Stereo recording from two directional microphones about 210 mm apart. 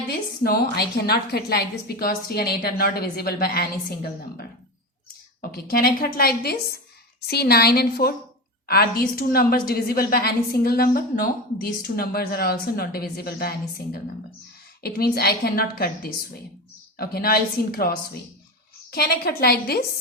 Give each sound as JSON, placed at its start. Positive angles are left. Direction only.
{"t": 0.1, "sound": "a woman's voice", "side_deg": 45}
{"t": 5.4, "sound": "a woman's voice", "side_deg": 45}